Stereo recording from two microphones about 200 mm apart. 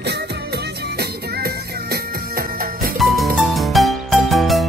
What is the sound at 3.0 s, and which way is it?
Music, centre (ahead or behind).